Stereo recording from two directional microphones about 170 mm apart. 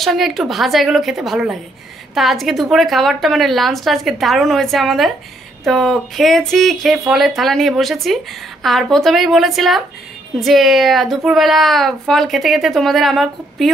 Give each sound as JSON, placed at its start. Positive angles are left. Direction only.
{"t": 0.0, "sound": "a woman's voice", "side_deg": 0}